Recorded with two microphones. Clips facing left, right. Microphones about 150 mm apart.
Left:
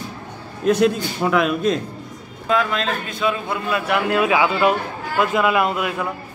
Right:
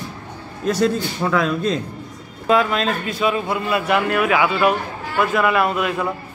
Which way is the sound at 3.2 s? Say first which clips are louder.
Right 2 dB; 5° right (ahead or behind).